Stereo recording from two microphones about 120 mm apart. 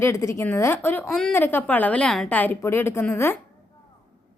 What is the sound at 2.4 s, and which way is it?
Speech, 20° left (ahead or behind).